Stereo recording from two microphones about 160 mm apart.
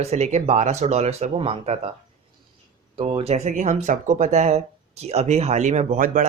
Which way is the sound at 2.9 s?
35° right (ahead or behind).